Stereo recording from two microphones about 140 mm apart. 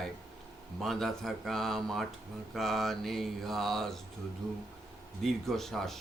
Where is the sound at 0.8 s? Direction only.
Centre (ahead or behind).